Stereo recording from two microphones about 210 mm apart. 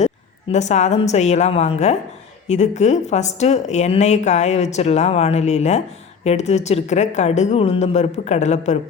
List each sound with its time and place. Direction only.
0.0 s a woman's voice: 30° left (ahead or behind)